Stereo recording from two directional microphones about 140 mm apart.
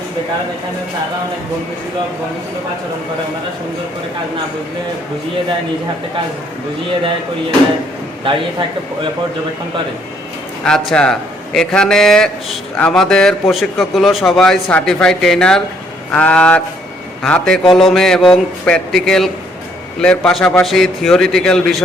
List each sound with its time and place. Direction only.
8.2 s a man's voice: 35° right (ahead or behind)
10.6 s a man's voice: 5° left (ahead or behind)